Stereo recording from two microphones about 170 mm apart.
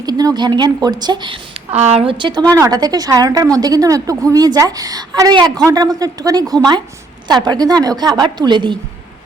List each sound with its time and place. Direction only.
0.0 s a woman's voice: 20° right (ahead or behind)
1.7 s a woman's voice: 40° right (ahead or behind)